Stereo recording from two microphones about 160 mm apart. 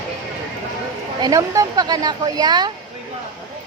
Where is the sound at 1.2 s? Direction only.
20° right (ahead or behind).